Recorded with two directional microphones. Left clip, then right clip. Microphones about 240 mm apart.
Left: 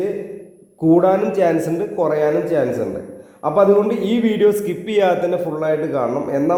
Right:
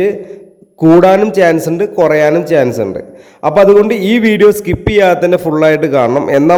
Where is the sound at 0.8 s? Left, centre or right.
Right.